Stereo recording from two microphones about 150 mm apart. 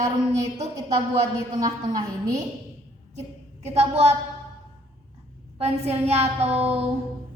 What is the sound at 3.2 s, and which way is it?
Speech, 45° right (ahead or behind).